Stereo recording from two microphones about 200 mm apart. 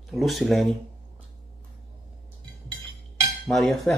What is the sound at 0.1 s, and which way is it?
Speech, centre (ahead or behind).